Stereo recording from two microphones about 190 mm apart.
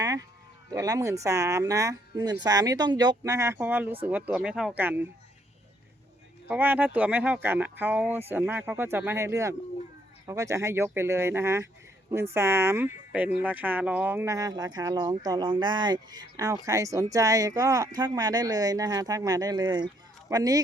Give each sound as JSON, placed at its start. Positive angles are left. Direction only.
{"t": 0.0, "sound": "sheep", "side_deg": -15}
{"t": 0.7, "sound": "speech", "side_deg": -20}
{"t": 6.5, "sound": "speech", "side_deg": -10}